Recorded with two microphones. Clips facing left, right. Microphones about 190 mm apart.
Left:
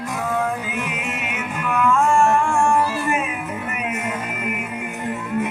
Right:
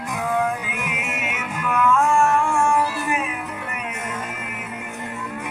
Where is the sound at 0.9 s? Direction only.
5° right (ahead or behind).